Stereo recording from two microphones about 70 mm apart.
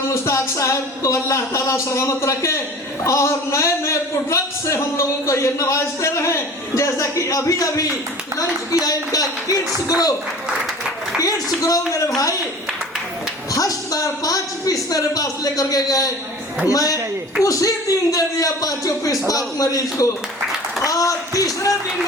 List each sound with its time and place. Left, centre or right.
0.1 s a man's voice: left
11.2 s a man's voice: left
13.5 s a man's voice: left
20.8 s a sound: left